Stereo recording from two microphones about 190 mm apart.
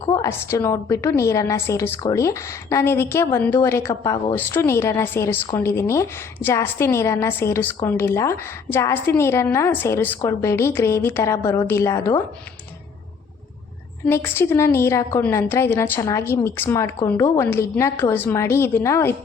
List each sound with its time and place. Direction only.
0.0 s a sound: 25° left (ahead or behind)
0.3 s a woman's voice: 15° left (ahead or behind)
14.1 s a woman's voice: 10° left (ahead or behind)